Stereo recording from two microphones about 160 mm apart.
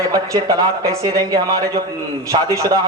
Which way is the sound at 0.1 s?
20° right (ahead or behind).